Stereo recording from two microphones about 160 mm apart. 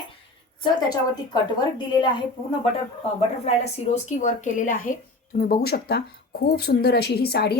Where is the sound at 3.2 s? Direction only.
45° left (ahead or behind).